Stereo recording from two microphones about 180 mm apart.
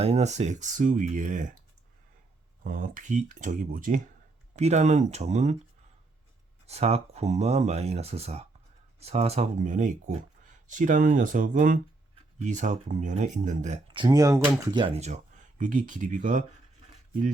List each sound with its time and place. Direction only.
0.0 s speech: 35° right (ahead or behind)
2.6 s speech: 50° right (ahead or behind)
6.7 s speech: 35° right (ahead or behind)
13.9 s speech: 25° right (ahead or behind)
14.8 s speech: 35° right (ahead or behind)